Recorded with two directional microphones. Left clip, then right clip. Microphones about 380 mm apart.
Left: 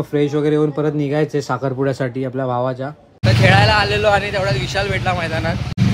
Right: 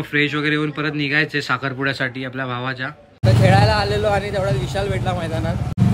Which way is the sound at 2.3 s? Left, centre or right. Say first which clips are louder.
Left 5 dB; right.